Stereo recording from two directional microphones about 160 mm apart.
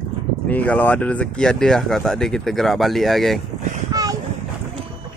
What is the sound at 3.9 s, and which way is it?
Boat, 25° right (ahead or behind).